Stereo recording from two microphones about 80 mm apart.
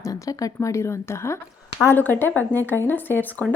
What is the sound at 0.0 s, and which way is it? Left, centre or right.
A woman's voice, left.